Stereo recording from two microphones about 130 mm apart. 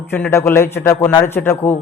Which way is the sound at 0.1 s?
20° left (ahead or behind).